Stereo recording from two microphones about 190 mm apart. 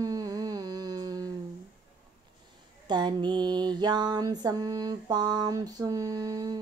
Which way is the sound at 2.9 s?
25° right (ahead or behind).